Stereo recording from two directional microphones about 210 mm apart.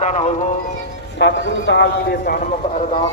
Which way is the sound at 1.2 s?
55° left (ahead or behind).